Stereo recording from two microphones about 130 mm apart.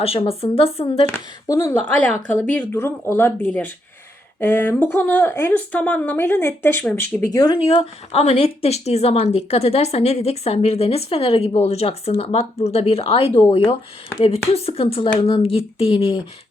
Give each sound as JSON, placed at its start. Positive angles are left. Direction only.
{"t": 0.0, "sound": "speech", "side_deg": 50}
{"t": 1.5, "sound": "speech", "side_deg": 25}
{"t": 2.0, "sound": "speech", "side_deg": 10}
{"t": 7.3, "sound": "speech", "side_deg": 40}